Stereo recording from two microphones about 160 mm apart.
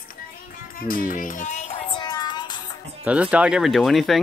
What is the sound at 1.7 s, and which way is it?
Music, 30° left (ahead or behind).